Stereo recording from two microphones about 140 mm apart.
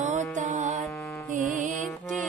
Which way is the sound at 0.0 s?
60° right (ahead or behind).